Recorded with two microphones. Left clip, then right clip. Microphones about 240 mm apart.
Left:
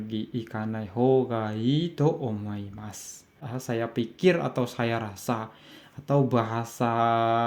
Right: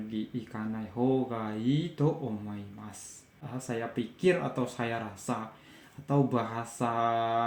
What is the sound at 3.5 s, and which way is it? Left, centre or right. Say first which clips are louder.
Speech: left 5 dB; left.